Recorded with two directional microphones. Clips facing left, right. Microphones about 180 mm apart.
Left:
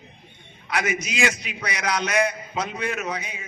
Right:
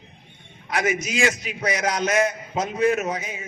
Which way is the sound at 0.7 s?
45° right (ahead or behind).